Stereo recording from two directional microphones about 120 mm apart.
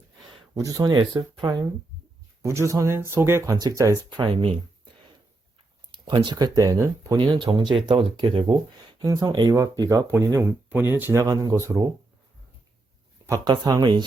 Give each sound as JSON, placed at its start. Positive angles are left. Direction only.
{"t": 0.5, "sound": "speech", "side_deg": -30}
{"t": 2.4, "sound": "speech", "side_deg": -25}
{"t": 4.3, "sound": "speech", "side_deg": -45}
{"t": 5.9, "sound": "speech", "side_deg": -40}
{"t": 7.3, "sound": "speech", "side_deg": -40}
{"t": 9.0, "sound": "speech", "side_deg": -30}
{"t": 10.1, "sound": "speech", "side_deg": -20}
{"t": 13.2, "sound": "speech", "side_deg": -30}